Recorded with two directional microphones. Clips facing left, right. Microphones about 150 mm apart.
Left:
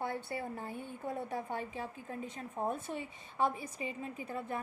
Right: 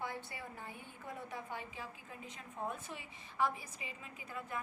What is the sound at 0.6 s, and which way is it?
Speech, 30° left (ahead or behind).